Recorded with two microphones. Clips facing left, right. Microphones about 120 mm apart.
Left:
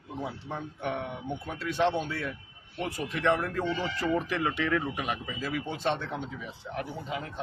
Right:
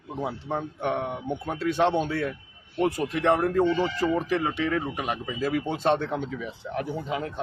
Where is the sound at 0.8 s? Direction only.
55° right (ahead or behind).